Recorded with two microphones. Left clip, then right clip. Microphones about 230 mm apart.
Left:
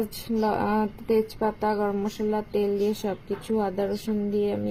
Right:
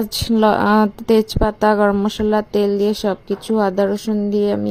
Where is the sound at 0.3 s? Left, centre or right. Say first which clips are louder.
Right 11 dB; right.